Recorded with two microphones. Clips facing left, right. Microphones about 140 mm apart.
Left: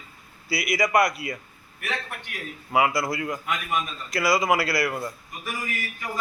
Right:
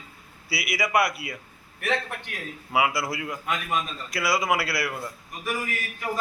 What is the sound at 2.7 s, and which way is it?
A man's voice, 5° right (ahead or behind).